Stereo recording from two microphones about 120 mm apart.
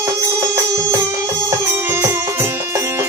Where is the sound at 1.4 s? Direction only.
25° right (ahead or behind).